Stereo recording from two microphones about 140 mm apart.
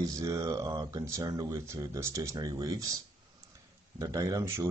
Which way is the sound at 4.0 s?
25° right (ahead or behind).